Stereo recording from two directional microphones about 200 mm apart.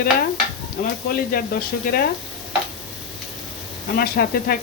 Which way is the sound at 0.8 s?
40° left (ahead or behind).